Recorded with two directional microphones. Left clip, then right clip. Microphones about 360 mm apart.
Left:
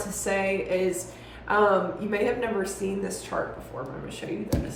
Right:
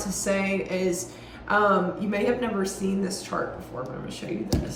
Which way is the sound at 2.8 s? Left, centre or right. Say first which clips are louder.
Even; left.